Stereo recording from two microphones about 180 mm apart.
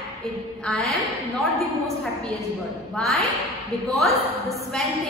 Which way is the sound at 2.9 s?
Centre (ahead or behind).